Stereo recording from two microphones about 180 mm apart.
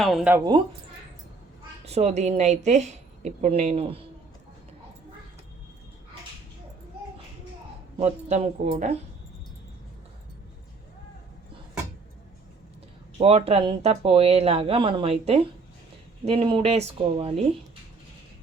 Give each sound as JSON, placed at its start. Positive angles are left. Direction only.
{"t": 0.0, "sound": "speech", "side_deg": 0}
{"t": 0.3, "sound": "speech", "side_deg": -25}
{"t": 1.8, "sound": "a woman's voice", "side_deg": -35}
{"t": 7.9, "sound": "a woman's voice", "side_deg": -35}
{"t": 13.1, "sound": "a woman's voice", "side_deg": -30}